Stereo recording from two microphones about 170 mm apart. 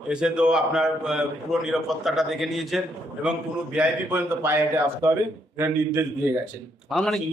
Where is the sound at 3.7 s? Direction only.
10° right (ahead or behind).